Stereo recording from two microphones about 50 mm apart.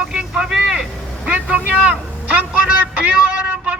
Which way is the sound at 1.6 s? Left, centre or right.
Right.